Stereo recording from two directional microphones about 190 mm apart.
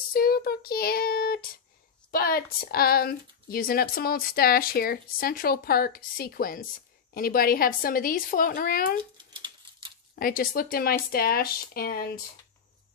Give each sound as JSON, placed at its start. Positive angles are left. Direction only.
{"t": 0.1, "sound": "child singing", "side_deg": 55}
{"t": 2.0, "sound": "speech", "side_deg": 50}
{"t": 9.2, "sound": "a sound", "side_deg": -25}
{"t": 10.1, "sound": "speech", "side_deg": 50}